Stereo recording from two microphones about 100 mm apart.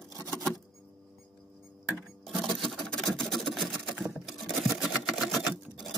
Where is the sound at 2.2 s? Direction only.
Centre (ahead or behind).